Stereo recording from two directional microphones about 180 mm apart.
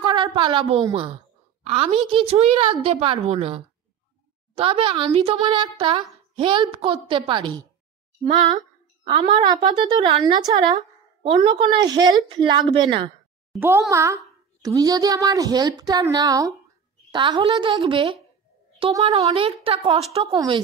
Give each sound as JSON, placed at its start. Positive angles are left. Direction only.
{"t": 0.0, "sound": "a woman's voice", "side_deg": -25}
{"t": 13.6, "sound": "a woman's voice", "side_deg": -15}